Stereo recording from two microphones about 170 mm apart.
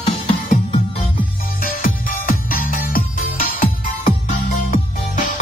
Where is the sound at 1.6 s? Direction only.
55° left (ahead or behind).